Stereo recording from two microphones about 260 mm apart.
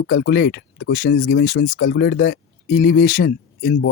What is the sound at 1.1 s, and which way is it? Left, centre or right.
Speech, left.